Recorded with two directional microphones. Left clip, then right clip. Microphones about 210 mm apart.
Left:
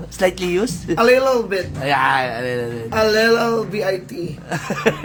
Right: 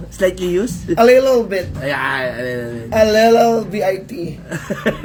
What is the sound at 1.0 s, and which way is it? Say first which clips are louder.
Speech: right 3 dB; 50° left (ahead or behind).